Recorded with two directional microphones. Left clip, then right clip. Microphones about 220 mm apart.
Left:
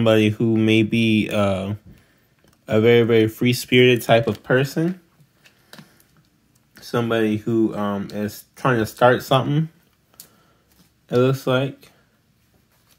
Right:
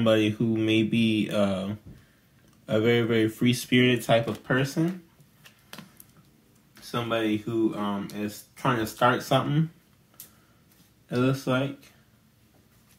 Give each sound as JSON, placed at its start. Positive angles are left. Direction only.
{"t": 0.0, "sound": "speech", "side_deg": 40}
{"t": 6.7, "sound": "speech", "side_deg": 50}
{"t": 11.1, "sound": "speech", "side_deg": 50}